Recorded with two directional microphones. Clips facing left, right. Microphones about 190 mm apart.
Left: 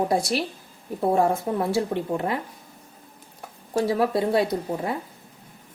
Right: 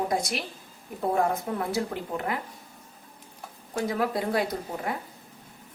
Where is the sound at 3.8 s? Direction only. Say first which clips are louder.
Left 5 dB; 30° left (ahead or behind).